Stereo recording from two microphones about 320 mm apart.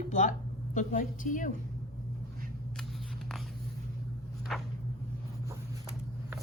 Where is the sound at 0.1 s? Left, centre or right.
Left.